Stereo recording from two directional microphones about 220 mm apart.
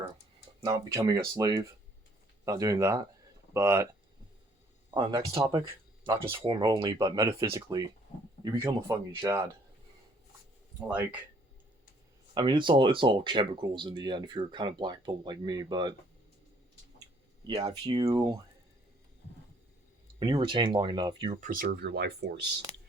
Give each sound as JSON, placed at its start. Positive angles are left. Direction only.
{"t": 0.6, "sound": "speech", "side_deg": -15}
{"t": 4.9, "sound": "speech", "side_deg": -20}
{"t": 10.8, "sound": "speech", "side_deg": -5}
{"t": 12.3, "sound": "speech", "side_deg": -20}
{"t": 17.4, "sound": "speech", "side_deg": -20}
{"t": 20.1, "sound": "speech", "side_deg": -20}
{"t": 21.4, "sound": "speech", "side_deg": -40}